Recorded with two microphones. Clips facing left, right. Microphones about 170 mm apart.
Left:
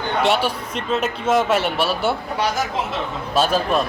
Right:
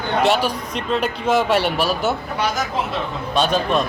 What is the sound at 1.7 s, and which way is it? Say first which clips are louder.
Speech: even; 40° right (ahead or behind).